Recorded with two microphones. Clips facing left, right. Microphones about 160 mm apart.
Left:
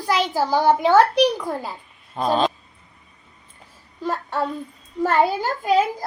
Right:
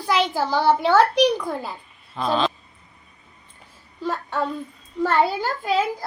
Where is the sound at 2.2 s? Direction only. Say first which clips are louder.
Left 2 dB; 45° left (ahead or behind).